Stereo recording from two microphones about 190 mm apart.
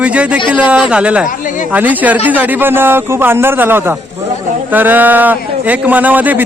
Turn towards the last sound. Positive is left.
turn(degrees=-10)  # may be behind; listen again after turning